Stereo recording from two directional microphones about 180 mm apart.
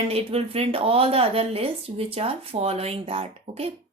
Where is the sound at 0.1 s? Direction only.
35° right (ahead or behind).